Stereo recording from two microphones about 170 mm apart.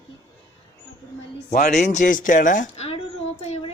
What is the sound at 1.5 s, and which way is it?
A woman's voice, 45° left (ahead or behind).